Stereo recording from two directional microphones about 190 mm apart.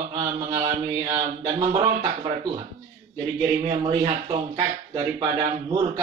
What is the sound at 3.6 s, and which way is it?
Speech, 30° right (ahead or behind).